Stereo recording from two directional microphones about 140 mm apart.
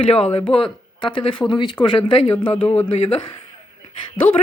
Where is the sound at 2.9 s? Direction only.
45° left (ahead or behind).